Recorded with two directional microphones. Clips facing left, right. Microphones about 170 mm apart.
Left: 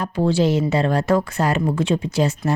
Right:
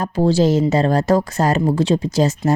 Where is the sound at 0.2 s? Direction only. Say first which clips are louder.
Right 3 dB; 40° right (ahead or behind).